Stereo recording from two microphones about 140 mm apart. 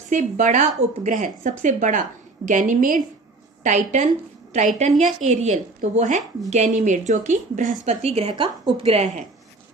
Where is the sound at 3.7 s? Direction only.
60° right (ahead or behind).